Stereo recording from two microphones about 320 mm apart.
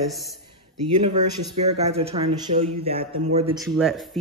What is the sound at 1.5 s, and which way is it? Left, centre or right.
Speech, centre.